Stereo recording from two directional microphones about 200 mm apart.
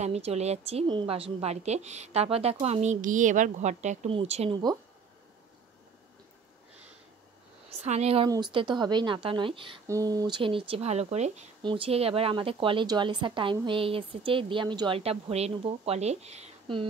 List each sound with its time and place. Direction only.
0.0 s a woman's voice: 30° right (ahead or behind)
7.7 s a woman's voice: 35° right (ahead or behind)